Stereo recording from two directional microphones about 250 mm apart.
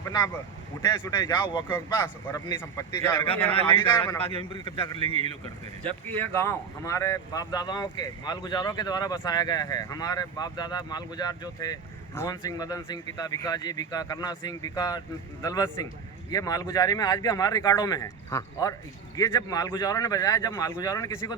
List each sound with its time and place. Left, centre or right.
0.9 s speech: centre
4.2 s a man's voice: left
5.0 s a man's voice: right
6.1 s speech: centre